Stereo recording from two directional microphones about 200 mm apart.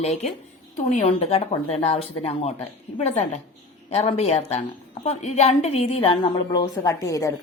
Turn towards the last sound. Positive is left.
turn(degrees=15)  # may be behind; listen again after turning